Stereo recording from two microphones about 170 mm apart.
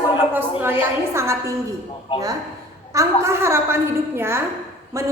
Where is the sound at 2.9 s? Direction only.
15° right (ahead or behind).